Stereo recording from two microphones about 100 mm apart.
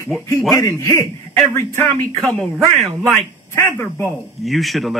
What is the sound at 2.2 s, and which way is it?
Speech, centre (ahead or behind).